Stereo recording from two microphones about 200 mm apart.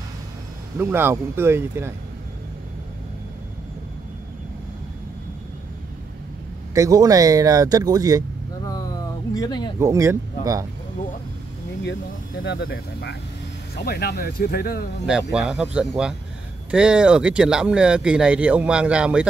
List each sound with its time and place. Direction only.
0.7 s speech: 10° right (ahead or behind)
6.7 s speech: 15° right (ahead or behind)
9.3 s speech: 20° left (ahead or behind)
9.8 s speech: 15° right (ahead or behind)
12.4 s speech: 55° left (ahead or behind)
15.0 s speech: 5° right (ahead or behind)